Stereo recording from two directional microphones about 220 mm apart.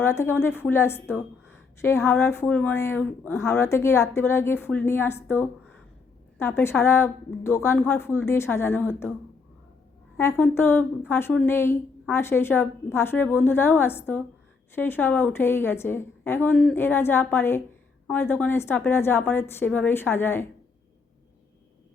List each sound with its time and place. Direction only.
0.0 s a woman's voice: 10° left (ahead or behind)
10.2 s a woman's voice: 10° left (ahead or behind)